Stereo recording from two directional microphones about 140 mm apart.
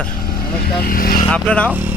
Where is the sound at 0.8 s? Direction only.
90° left.